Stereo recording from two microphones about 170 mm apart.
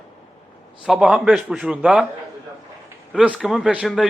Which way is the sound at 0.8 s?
5° right (ahead or behind).